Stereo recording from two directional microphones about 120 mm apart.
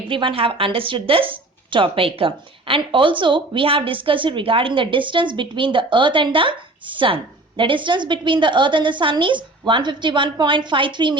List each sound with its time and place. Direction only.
0.1 s a woman's voice: 45° right (ahead or behind)